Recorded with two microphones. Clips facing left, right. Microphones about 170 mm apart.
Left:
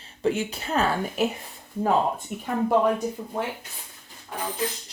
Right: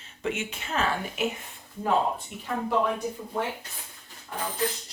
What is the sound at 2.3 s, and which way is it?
Speech, 50° left (ahead or behind).